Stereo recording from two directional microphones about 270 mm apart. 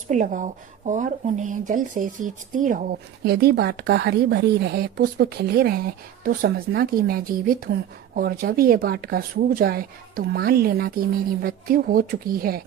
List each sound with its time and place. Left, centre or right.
0.1 s speech: right